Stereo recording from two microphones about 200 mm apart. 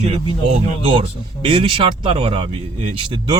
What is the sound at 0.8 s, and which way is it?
Speech, 30° right (ahead or behind).